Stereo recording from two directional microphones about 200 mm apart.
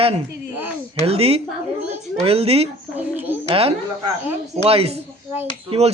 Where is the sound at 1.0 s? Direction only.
30° right (ahead or behind).